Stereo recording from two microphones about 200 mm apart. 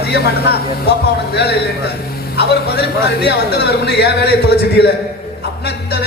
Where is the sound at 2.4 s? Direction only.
55° left (ahead or behind).